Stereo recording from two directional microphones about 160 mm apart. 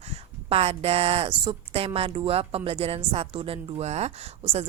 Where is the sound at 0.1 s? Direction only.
40° right (ahead or behind).